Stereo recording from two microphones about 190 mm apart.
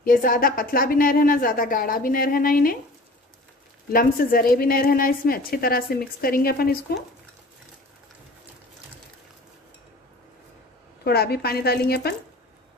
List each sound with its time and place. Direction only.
0.0 s a woman's voice: 50° left (ahead or behind)
3.9 s a woman's voice: 50° left (ahead or behind)
11.1 s speech: 55° left (ahead or behind)